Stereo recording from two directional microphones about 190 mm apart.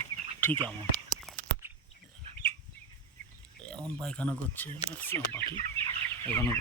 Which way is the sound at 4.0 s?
5° left (ahead or behind).